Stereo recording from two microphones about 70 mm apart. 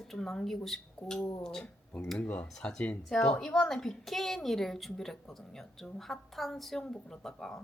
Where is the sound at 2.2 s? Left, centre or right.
Left.